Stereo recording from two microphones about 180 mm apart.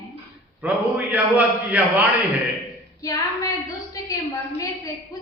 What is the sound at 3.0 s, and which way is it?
Speech, 20° left (ahead or behind).